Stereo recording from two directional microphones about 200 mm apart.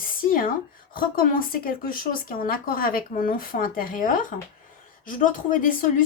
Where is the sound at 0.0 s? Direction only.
45° left (ahead or behind).